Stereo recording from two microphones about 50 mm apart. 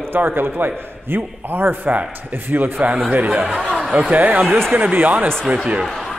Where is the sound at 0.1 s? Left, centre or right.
Right.